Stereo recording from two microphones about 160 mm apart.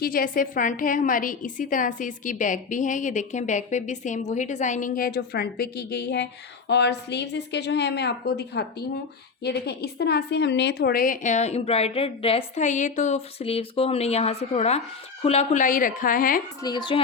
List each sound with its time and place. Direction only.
0.0 s a woman's voice: 60° left (ahead or behind)
16.6 s speech: 30° left (ahead or behind)